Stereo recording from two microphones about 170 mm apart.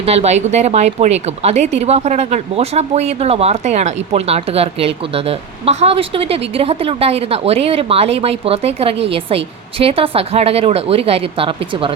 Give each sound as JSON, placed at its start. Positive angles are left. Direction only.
{"t": 0.0, "sound": "a woman's voice", "side_deg": -40}